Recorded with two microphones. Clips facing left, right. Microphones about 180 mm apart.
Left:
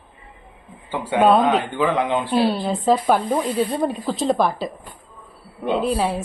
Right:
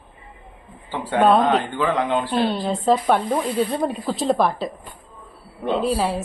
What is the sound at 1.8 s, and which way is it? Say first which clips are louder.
Speech: left 1 dB; 15° left (ahead or behind).